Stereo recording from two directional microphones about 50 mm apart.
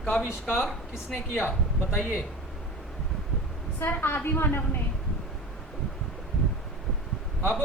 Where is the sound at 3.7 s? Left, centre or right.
Left.